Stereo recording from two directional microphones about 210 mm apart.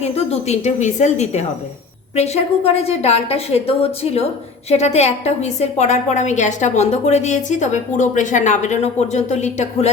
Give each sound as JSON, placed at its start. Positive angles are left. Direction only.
{"t": 0.0, "sound": "a woman's voice", "side_deg": 30}